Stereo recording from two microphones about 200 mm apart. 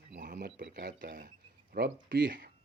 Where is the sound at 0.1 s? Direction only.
40° right (ahead or behind).